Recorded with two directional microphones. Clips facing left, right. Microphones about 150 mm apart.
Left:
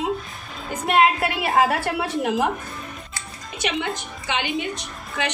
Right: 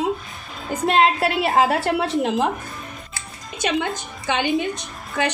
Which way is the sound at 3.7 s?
45° right (ahead or behind).